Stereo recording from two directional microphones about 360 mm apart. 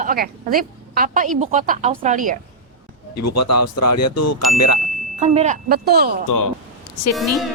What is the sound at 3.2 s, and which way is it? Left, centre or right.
Speech, left.